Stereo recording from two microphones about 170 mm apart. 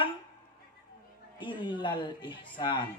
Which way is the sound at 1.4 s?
30° left (ahead or behind).